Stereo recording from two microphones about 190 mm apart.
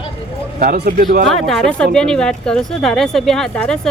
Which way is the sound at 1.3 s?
Centre (ahead or behind).